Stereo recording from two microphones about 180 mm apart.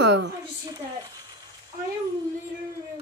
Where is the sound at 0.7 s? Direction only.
20° right (ahead or behind).